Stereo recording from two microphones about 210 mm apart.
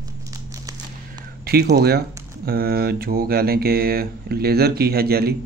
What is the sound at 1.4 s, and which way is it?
Mantra, 45° right (ahead or behind).